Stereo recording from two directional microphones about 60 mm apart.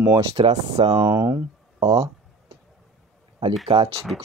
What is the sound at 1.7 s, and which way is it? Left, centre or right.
Speech, right.